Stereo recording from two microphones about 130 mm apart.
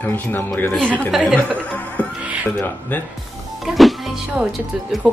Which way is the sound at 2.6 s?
15° left (ahead or behind).